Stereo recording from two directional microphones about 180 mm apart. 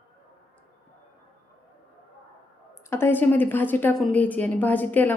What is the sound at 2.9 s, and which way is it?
Speech, 10° left (ahead or behind).